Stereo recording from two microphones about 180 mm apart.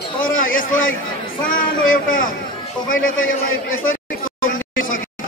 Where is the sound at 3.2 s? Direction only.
90° left.